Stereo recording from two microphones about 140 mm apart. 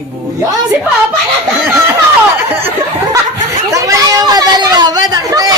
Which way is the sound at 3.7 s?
25° right (ahead or behind).